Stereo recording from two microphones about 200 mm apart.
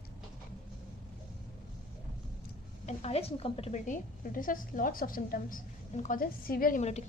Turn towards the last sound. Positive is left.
turn(degrees=35)  # may be behind; listen again after turning